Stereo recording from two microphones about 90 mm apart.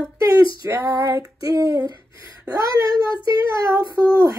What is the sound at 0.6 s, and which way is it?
Female singing, 30° right (ahead or behind).